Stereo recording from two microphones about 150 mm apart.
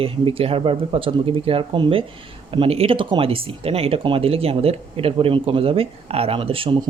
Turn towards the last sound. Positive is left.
turn(degrees=-35)  # may be behind; listen again after turning